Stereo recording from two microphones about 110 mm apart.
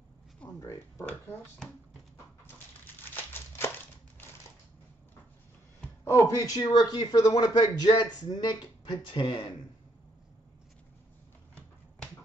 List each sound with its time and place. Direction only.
0.6 s speech: 25° left (ahead or behind)
3.2 s crumpling: 20° left (ahead or behind)
6.0 s a man's voice: 25° left (ahead or behind); by 9.5 s 45° left (ahead or behind)